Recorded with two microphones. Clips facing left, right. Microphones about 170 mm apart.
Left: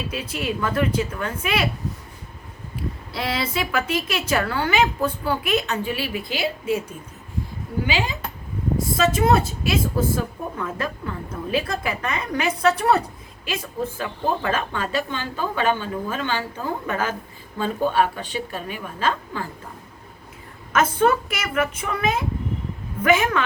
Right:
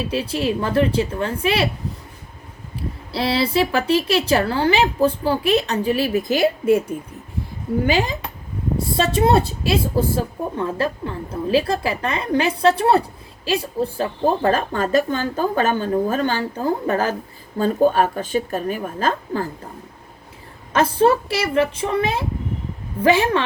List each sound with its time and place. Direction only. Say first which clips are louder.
0.1 s a woman's voice: right 6 dB; 30° right (ahead or behind)
3.1 s a woman's voice: right 7 dB; 35° right (ahead or behind); by 6.8 s 50° right (ahead or behind)
7.9 s speech: right 5 dB; 45° right (ahead or behind)
9.0 s a woman's voice: right 2 dB; 30° right (ahead or behind)
20.7 s a woman's voice: right 3 dB; 30° right (ahead or behind)